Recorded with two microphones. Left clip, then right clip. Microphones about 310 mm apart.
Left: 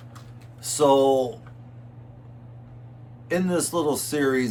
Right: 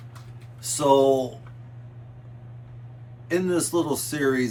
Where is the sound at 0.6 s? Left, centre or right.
Centre.